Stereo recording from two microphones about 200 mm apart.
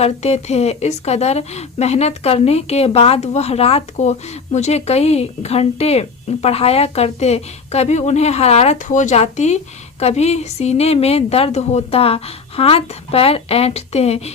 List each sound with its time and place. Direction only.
0.0 s speech: 35° left (ahead or behind)